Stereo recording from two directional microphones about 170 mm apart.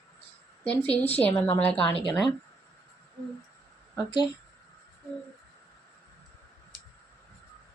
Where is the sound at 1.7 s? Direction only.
30° left (ahead or behind).